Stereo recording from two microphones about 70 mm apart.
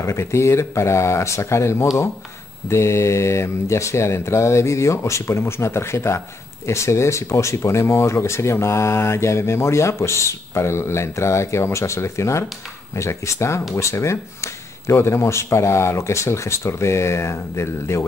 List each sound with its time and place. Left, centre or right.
0.0 s speech: left